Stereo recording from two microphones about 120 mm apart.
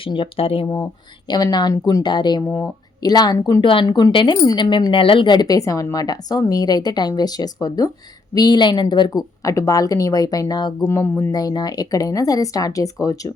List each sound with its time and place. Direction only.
0.0 s speech: 45° left (ahead or behind)
1.3 s speech: 35° left (ahead or behind)
10.8 s speech: 20° left (ahead or behind)